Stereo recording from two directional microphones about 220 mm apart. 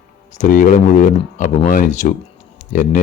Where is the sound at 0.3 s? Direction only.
35° left (ahead or behind).